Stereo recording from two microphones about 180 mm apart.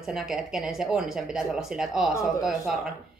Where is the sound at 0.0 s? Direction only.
Centre (ahead or behind).